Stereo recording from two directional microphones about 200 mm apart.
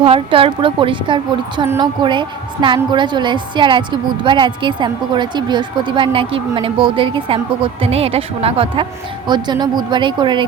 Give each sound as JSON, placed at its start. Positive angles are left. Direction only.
{"t": 0.0, "sound": "a woman's voice", "side_deg": -25}